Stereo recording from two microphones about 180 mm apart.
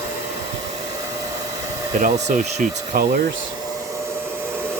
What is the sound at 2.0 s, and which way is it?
Speech, 45° right (ahead or behind).